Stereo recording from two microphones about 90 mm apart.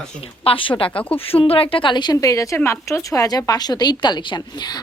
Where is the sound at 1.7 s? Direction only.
65° left (ahead or behind).